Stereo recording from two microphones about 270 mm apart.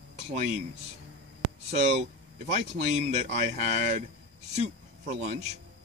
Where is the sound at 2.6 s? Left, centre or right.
Right.